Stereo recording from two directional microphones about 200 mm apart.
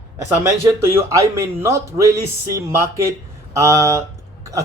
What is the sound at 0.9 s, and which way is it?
Speech, 15° right (ahead or behind).